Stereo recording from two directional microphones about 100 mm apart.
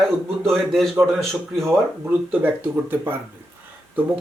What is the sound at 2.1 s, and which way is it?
Speech, 20° right (ahead or behind).